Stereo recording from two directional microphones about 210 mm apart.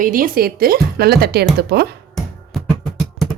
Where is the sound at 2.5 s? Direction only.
Centre (ahead or behind).